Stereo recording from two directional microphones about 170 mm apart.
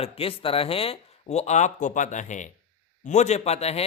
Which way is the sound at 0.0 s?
35° left (ahead or behind).